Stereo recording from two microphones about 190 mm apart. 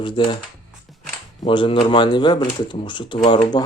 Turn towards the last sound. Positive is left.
turn(degrees=25)  # may be behind; listen again after turning